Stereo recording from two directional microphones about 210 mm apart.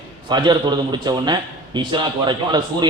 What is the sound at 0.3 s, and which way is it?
A man's voice, 20° right (ahead or behind).